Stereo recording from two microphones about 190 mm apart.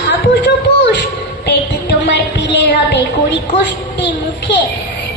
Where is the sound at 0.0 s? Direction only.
65° left (ahead or behind).